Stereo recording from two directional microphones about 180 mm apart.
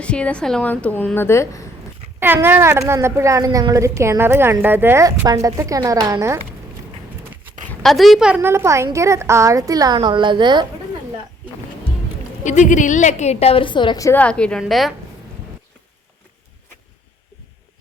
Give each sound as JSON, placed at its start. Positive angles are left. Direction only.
{"t": 0.0, "sound": "a woman's voice", "side_deg": 5}
{"t": 2.2, "sound": "a woman's voice", "side_deg": -10}
{"t": 7.7, "sound": "a woman's voice", "side_deg": 0}
{"t": 12.4, "sound": "a woman's voice", "side_deg": 45}